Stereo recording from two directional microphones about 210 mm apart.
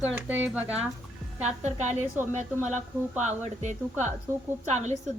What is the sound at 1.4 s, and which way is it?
Speech, 35° right (ahead or behind).